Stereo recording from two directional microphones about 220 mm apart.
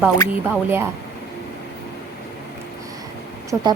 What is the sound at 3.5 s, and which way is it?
Speech, 15° right (ahead or behind).